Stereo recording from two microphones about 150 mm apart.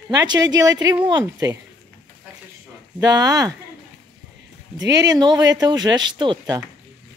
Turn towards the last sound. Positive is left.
turn(degrees=-30)  # may be behind; listen again after turning